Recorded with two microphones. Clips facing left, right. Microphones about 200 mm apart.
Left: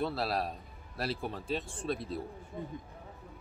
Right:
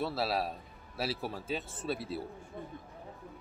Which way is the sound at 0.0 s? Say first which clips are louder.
Even; 5° right (ahead or behind).